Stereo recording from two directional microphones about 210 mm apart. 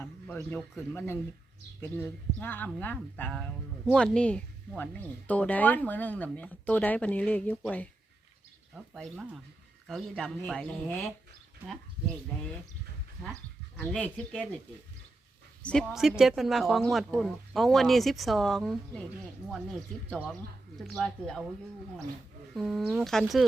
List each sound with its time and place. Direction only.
0.0 s speech: 10° left (ahead or behind)
13.7 s speech: 5° left (ahead or behind)
15.6 s speech: centre (ahead or behind)
22.5 s speech: centre (ahead or behind)